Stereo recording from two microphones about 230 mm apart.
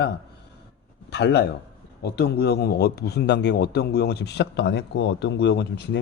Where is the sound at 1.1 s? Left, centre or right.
Left.